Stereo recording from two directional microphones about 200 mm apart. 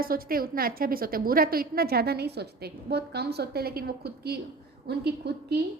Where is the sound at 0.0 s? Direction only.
45° right (ahead or behind).